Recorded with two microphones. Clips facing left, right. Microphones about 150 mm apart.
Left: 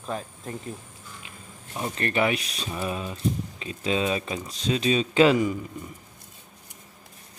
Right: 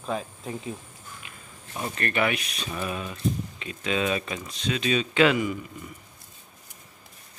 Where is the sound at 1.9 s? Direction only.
25° left (ahead or behind).